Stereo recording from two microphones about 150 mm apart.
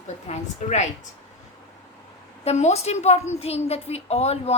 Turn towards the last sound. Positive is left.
turn(degrees=45)  # may be behind; listen again after turning